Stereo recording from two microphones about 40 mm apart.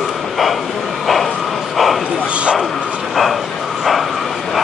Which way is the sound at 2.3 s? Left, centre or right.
Right.